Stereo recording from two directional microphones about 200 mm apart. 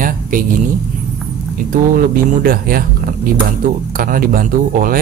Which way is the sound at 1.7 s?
45° right (ahead or behind).